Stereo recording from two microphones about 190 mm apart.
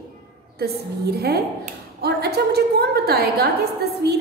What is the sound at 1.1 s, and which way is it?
A woman's voice, 55° right (ahead or behind).